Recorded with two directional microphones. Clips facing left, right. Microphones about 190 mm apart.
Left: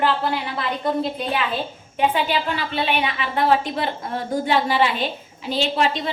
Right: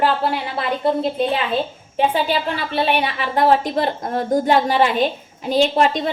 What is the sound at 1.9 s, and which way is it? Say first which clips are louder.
A woman's voice: right 2 dB; 35° right (ahead or behind).